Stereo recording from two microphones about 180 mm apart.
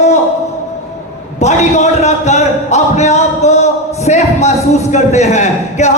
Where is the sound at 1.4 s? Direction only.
40° left (ahead or behind).